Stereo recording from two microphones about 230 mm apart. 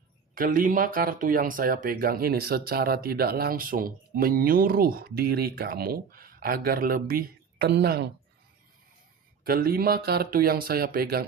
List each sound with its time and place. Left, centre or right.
0.3 s speech: right
9.4 s speech: right